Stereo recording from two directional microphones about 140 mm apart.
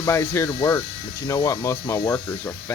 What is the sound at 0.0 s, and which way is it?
Speech, 20° left (ahead or behind).